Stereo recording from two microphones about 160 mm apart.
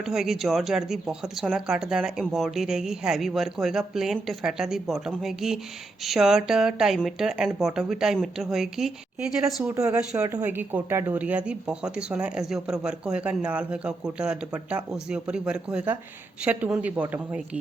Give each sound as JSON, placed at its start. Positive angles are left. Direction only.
{"t": 0.0, "sound": "speech", "side_deg": 0}
{"t": 9.7, "sound": "speech", "side_deg": -20}